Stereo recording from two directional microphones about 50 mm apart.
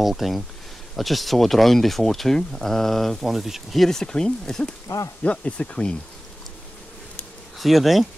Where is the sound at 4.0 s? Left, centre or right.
Centre.